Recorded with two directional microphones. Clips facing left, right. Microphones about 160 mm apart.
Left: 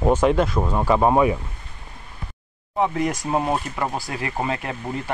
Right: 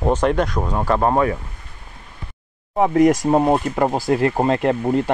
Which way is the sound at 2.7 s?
45° right (ahead or behind).